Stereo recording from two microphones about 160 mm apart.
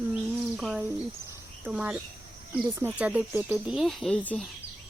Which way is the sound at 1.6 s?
10° right (ahead or behind).